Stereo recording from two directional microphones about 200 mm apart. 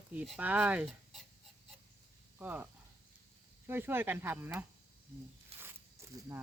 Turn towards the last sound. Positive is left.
turn(degrees=-30)  # may be behind; listen again after turning